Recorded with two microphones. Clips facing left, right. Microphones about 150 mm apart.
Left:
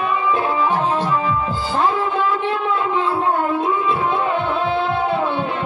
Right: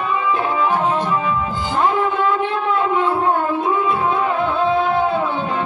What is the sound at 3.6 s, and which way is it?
Music, 25° left (ahead or behind).